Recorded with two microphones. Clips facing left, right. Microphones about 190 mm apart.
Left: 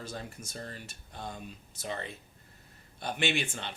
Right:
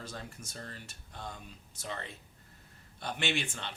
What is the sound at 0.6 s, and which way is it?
Speech, 20° left (ahead or behind).